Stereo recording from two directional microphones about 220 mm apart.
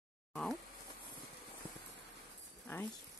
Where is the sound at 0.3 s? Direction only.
Centre (ahead or behind).